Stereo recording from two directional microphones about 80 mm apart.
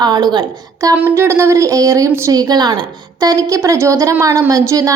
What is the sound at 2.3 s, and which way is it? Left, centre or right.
A woman's voice, right.